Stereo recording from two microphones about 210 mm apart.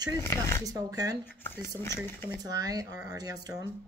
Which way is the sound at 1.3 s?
10° left (ahead or behind).